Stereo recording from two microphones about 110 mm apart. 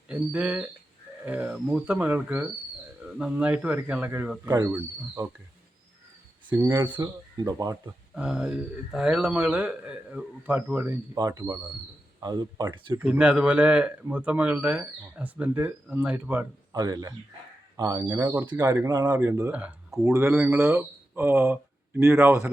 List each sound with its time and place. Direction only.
0.1 s speech: 10° right (ahead or behind)
6.7 s speech: 45° right (ahead or behind)
8.1 s speech: 10° right (ahead or behind)
11.2 s speech: 35° right (ahead or behind)
13.0 s speech: 10° right (ahead or behind)
16.7 s speech: 30° right (ahead or behind)
18.9 s speech: 35° right (ahead or behind)
19.2 s speech: 20° right (ahead or behind)
19.5 s speech: 10° right (ahead or behind)
20.1 s speech: 25° right (ahead or behind)